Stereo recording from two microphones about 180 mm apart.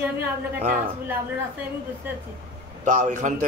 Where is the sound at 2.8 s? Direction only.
40° right (ahead or behind).